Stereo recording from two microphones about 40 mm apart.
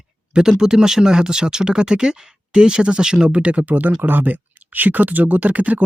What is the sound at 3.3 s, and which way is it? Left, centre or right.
Speech, right.